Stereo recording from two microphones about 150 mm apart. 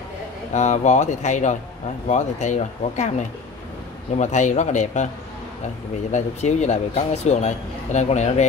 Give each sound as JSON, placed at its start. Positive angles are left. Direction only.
{"t": 0.5, "sound": "speech", "side_deg": 50}
{"t": 4.2, "sound": "speech", "side_deg": 50}
{"t": 6.1, "sound": "speech", "side_deg": 50}